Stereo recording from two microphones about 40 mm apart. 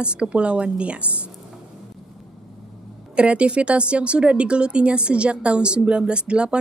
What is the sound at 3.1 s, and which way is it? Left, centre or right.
A woman's voice, right.